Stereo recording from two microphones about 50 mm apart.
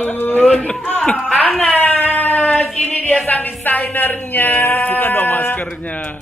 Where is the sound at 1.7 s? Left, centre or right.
Left.